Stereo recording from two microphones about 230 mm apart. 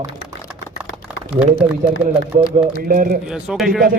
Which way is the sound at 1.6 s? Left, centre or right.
Right.